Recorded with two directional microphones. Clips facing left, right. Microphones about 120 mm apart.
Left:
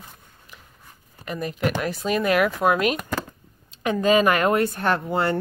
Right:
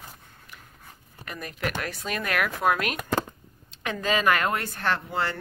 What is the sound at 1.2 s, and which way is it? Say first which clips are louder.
Speech: left 7 dB; 25° left (ahead or behind).